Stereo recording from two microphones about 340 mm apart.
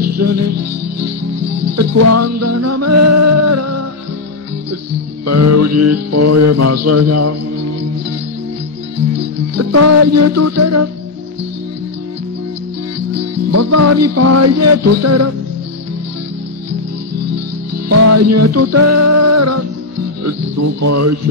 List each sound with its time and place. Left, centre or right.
0.0 s music: right
1.8 s music: right
5.2 s music: right
9.6 s music: right
13.1 s music: right
17.8 s music: right
20.2 s speech: right